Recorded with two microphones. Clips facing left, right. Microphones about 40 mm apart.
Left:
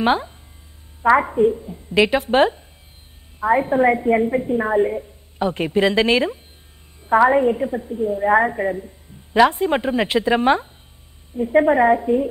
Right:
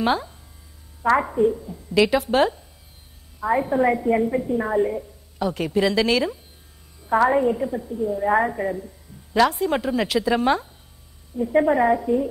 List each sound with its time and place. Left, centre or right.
0.0 s a woman's voice: left